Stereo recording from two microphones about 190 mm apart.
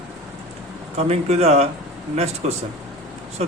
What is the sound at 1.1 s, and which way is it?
A man's voice, 35° right (ahead or behind).